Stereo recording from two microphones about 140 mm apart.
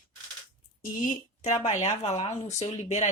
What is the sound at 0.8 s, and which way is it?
Speech, 75° left (ahead or behind).